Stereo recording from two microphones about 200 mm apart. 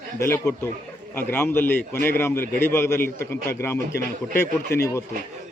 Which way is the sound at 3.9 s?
55° left (ahead or behind).